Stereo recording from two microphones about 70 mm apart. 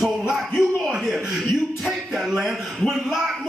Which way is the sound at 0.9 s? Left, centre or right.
Centre.